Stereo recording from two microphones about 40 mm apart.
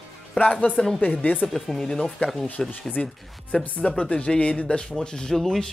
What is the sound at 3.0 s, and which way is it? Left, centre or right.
Speech, left.